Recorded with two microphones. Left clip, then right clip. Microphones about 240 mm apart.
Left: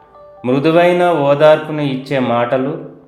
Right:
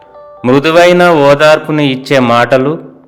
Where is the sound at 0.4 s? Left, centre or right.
Right.